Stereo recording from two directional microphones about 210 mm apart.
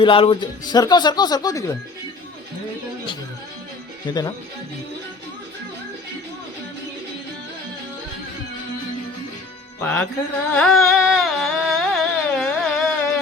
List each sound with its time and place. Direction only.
0.0 s speech: 25° left (ahead or behind)
4.1 s music: 15° left (ahead or behind)
9.8 s music: 10° left (ahead or behind)